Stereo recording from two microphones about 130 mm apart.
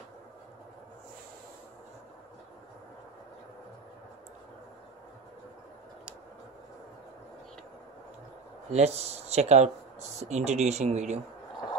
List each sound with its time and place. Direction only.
8.7 s speech: 55° right (ahead or behind)